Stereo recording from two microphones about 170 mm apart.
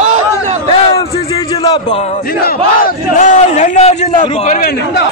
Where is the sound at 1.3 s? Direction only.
30° left (ahead or behind).